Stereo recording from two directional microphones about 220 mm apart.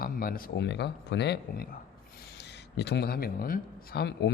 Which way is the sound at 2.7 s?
50° left (ahead or behind).